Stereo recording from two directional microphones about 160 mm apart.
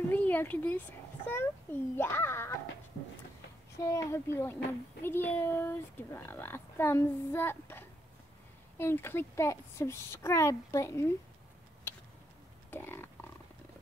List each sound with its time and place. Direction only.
0.1 s a child's voice: 10° left (ahead or behind)
3.7 s a child's voice: 20° left (ahead or behind)
12.7 s a sound: 15° left (ahead or behind)